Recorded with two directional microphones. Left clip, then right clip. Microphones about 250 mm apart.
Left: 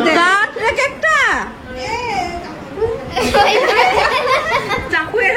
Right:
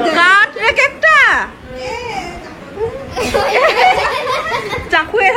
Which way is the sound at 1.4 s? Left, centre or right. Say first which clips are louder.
Right 1 dB; centre.